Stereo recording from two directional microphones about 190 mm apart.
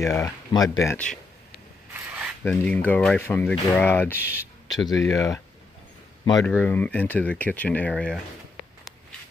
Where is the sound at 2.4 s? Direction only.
5° left (ahead or behind).